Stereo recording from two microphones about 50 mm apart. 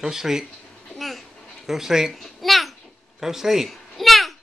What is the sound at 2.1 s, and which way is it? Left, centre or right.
Babbling, centre.